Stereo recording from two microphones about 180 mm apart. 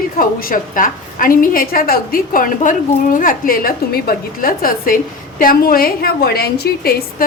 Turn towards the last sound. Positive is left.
turn(degrees=60)  # may be behind; listen again after turning